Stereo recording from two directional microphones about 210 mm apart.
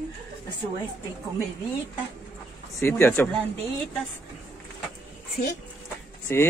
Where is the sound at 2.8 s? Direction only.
10° left (ahead or behind).